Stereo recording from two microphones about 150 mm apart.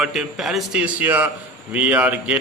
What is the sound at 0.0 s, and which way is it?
A man's voice, 5° right (ahead or behind).